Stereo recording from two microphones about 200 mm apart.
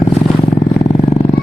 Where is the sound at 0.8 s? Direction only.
30° left (ahead or behind).